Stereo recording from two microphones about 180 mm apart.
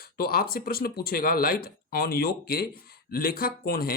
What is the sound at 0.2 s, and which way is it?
Speech, 55° left (ahead or behind).